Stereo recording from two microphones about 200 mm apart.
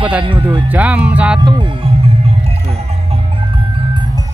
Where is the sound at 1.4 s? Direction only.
25° right (ahead or behind).